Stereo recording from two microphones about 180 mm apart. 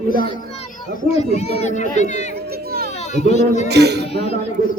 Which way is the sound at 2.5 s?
60° right (ahead or behind).